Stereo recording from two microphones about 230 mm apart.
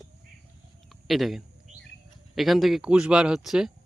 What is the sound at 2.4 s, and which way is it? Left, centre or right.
Speech, centre.